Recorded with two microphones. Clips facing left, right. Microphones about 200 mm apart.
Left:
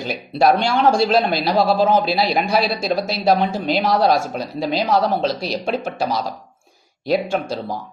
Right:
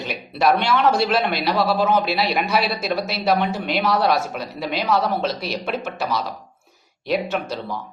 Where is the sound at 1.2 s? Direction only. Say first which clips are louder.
Left 3 dB; 30° left (ahead or behind).